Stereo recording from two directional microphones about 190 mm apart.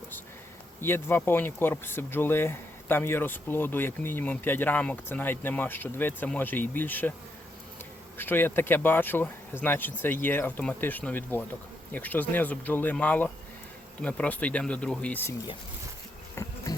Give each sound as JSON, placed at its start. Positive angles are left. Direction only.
{"t": 0.8, "sound": "speech", "side_deg": 10}
{"t": 8.2, "sound": "speech", "side_deg": 10}
{"t": 16.3, "sound": "bee", "side_deg": 15}